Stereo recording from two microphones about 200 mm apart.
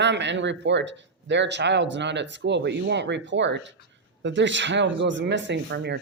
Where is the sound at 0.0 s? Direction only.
60° right (ahead or behind).